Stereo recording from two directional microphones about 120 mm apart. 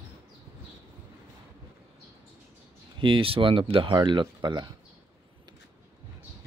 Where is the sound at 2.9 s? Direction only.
45° right (ahead or behind).